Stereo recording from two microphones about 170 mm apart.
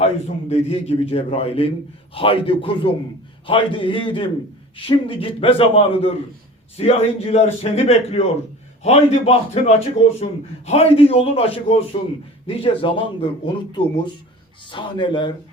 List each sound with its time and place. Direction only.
0.0 s a man's voice: 40° left (ahead or behind)